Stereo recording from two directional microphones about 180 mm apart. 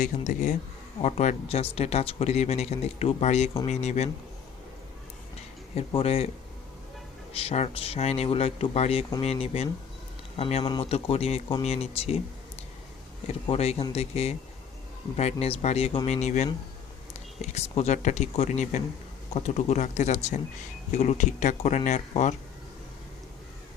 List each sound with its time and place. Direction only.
0.0 s speech: 45° left (ahead or behind)
5.7 s speech: 35° left (ahead or behind)
7.3 s speech: 35° left (ahead or behind)
13.2 s speech: 35° left (ahead or behind)